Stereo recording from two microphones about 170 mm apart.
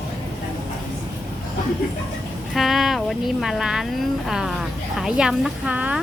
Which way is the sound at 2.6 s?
Centre (ahead or behind).